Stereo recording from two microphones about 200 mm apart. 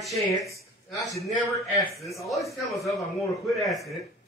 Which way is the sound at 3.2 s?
Centre (ahead or behind).